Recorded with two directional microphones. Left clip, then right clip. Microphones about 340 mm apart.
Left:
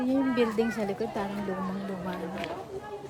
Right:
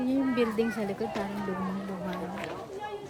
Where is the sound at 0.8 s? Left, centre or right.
Centre.